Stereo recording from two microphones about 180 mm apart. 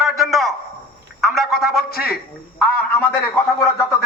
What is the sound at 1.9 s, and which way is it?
Speech, 60° left (ahead or behind).